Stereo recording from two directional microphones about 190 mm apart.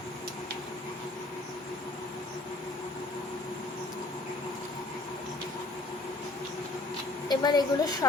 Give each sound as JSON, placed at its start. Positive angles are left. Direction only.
{"t": 7.3, "sound": "a woman's voice", "side_deg": 20}